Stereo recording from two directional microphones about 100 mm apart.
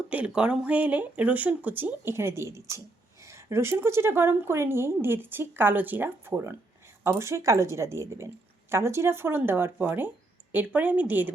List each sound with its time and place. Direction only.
0.1 s a woman's voice: 10° right (ahead or behind)